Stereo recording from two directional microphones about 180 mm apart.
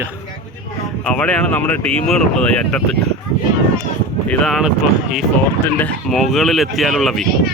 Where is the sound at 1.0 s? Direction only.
5° left (ahead or behind).